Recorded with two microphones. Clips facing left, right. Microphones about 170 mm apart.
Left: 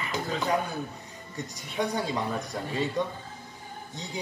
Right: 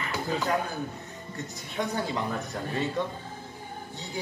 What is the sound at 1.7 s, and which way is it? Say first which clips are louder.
Speech: left 1 dB; 10° left (ahead or behind).